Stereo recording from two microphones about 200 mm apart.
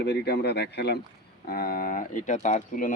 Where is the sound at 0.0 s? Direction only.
55° left (ahead or behind).